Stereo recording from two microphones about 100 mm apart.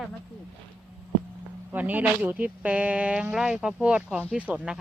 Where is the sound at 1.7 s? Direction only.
15° right (ahead or behind).